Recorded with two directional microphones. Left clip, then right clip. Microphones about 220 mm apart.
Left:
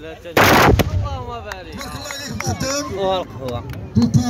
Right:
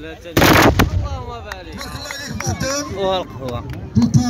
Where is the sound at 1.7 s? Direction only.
50° left (ahead or behind).